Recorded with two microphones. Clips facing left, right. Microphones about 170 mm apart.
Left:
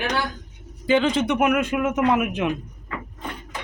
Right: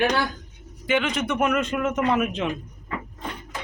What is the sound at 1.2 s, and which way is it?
A man's voice, 15° left (ahead or behind).